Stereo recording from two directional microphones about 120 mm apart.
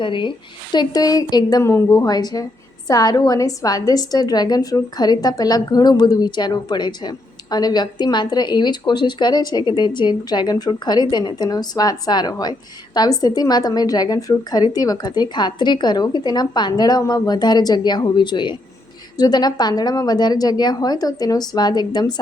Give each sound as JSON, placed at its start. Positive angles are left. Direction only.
{"t": 0.0, "sound": "a woman's voice", "side_deg": 45}
{"t": 1.7, "sound": "speech", "side_deg": 20}
{"t": 2.0, "sound": "a woman's voice", "side_deg": 35}